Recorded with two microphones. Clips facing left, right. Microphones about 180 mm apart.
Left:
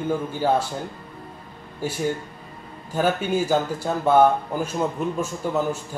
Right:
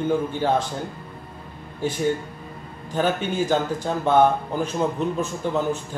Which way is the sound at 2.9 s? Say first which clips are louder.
Left 1 dB; 10° left (ahead or behind).